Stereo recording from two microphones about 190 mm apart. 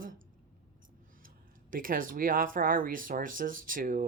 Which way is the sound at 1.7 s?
45° right (ahead or behind).